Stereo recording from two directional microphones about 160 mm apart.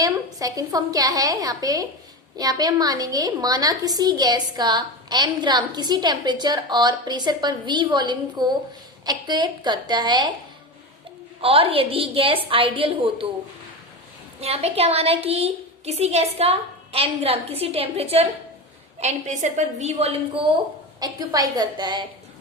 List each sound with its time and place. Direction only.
0.0 s a woman's voice: 20° right (ahead or behind)
11.3 s a woman's voice: 35° right (ahead or behind)
14.4 s a woman's voice: 40° right (ahead or behind)
21.0 s a woman's voice: 25° right (ahead or behind)